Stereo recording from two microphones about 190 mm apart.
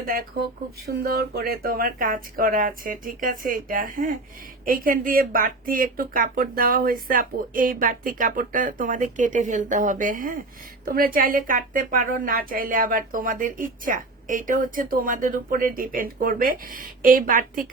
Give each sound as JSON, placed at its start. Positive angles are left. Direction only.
{"t": 0.9, "sound": "speech", "side_deg": -55}